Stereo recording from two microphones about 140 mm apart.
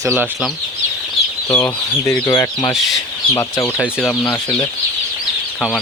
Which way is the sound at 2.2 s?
25° left (ahead or behind).